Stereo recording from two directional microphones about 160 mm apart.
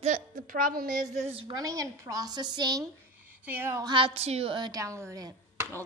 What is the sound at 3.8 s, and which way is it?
Speech, 30° right (ahead or behind).